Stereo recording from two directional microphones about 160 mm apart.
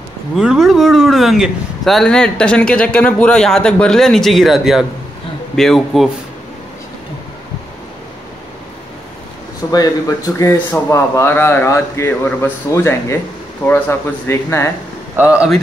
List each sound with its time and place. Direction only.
0.4 s speech: 5° right (ahead or behind)
9.7 s a man's voice: 20° left (ahead or behind)
15.1 s speech: 10° right (ahead or behind)